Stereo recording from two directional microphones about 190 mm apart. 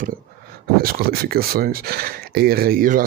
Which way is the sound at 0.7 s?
50° right (ahead or behind).